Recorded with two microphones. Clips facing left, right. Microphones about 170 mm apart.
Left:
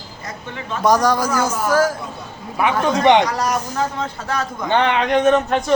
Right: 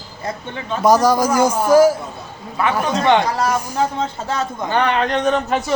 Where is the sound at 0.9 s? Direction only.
10° right (ahead or behind).